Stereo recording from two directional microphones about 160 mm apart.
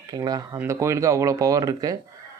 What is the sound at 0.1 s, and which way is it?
Speech, 25° right (ahead or behind).